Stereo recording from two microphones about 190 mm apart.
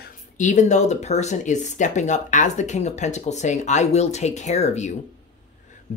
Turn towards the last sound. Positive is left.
turn(degrees=35)  # may be behind; listen again after turning